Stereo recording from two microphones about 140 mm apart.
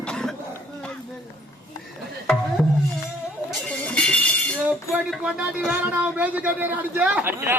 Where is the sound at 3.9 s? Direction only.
10° left (ahead or behind).